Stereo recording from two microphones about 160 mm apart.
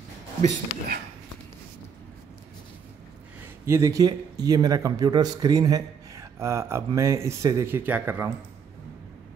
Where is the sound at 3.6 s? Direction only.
20° right (ahead or behind).